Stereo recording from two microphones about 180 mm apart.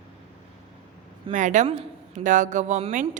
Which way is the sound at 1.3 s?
45° right (ahead or behind).